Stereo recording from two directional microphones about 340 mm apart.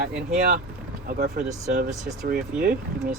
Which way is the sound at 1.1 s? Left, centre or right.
Right.